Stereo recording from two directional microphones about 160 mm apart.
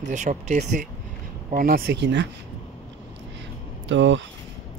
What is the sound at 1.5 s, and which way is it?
Speech, 65° right (ahead or behind).